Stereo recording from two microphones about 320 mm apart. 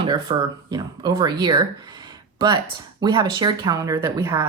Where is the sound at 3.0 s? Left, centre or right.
Centre.